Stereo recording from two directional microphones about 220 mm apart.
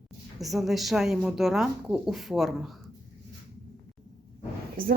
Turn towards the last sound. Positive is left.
turn(degrees=-40)  # may be behind; listen again after turning